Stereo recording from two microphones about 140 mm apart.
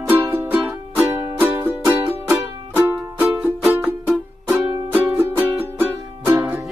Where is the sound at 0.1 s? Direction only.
15° right (ahead or behind).